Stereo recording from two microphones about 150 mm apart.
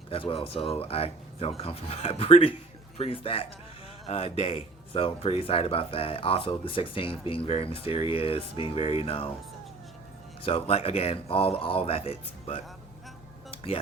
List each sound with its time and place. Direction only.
0.1 s speech: 40° left (ahead or behind)
10.4 s speech: 40° left (ahead or behind)